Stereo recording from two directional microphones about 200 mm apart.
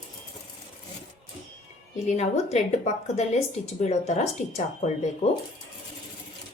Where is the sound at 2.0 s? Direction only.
35° left (ahead or behind).